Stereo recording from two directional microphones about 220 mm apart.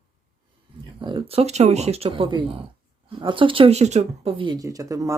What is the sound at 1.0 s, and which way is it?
Speech, 20° right (ahead or behind).